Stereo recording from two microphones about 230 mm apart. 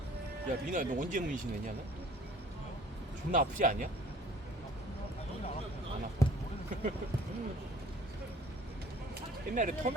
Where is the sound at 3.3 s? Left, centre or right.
Right.